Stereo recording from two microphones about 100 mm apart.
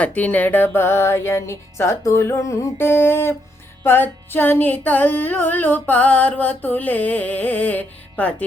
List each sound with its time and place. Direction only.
0.0 s speech: 15° left (ahead or behind)
3.8 s music: 20° left (ahead or behind)